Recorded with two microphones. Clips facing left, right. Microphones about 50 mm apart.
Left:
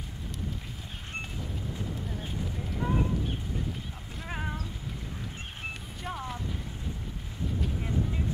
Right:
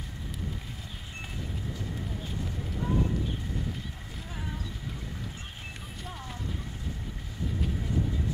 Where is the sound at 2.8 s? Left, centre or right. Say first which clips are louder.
Even; left.